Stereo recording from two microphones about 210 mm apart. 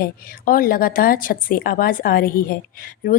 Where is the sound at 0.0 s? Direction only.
45° left (ahead or behind).